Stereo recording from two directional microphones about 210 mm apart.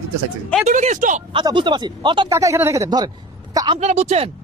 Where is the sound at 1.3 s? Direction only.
20° right (ahead or behind).